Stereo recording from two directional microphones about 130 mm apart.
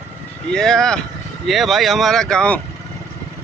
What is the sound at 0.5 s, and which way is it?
Speech, 5° left (ahead or behind).